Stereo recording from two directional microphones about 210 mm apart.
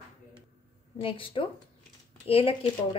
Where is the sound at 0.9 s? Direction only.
25° left (ahead or behind).